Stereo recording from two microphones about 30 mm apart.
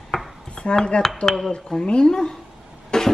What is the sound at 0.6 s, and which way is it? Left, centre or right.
Speech, left.